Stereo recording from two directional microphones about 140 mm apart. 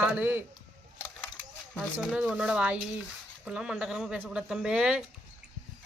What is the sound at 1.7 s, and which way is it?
Speech, 5° right (ahead or behind).